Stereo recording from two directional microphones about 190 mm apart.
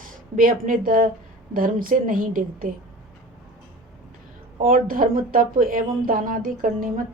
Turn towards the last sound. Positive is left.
turn(degrees=-45)  # may be behind; listen again after turning